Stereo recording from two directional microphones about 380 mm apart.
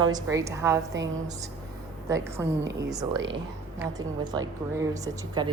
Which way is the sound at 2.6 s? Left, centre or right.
Right.